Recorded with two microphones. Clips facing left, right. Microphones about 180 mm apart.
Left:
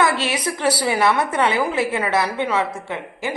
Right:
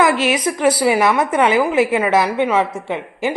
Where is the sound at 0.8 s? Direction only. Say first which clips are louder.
Right 4 dB; 15° right (ahead or behind).